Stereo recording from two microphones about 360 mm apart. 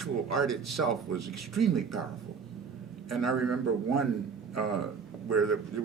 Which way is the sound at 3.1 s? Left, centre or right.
Right.